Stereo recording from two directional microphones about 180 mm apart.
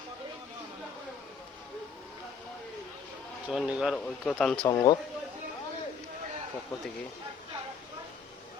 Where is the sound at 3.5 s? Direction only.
5° right (ahead or behind).